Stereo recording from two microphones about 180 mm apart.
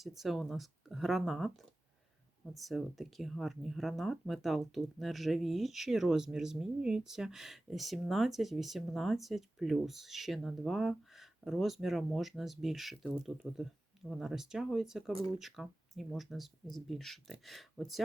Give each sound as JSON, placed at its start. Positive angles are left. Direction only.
{"t": 0.0, "sound": "speech", "side_deg": 0}